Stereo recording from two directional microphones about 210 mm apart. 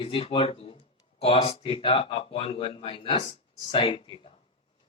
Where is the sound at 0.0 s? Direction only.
25° left (ahead or behind).